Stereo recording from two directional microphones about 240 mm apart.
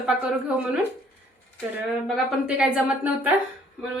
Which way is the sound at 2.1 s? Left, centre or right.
Centre.